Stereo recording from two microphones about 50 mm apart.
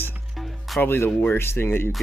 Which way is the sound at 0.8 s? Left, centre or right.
Left.